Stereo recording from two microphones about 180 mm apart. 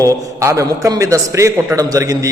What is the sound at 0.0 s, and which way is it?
A man's voice, 15° right (ahead or behind).